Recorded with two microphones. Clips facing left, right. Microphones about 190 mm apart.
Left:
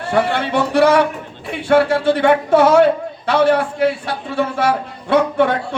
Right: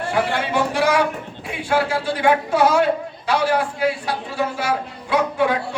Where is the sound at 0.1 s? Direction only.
60° left (ahead or behind).